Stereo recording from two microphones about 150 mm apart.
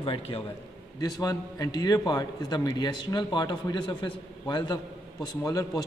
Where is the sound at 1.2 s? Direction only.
25° left (ahead or behind).